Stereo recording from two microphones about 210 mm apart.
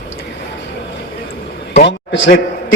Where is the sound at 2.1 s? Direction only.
60° left (ahead or behind).